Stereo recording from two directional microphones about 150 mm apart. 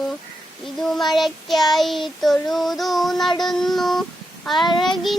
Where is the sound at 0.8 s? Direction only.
Centre (ahead or behind).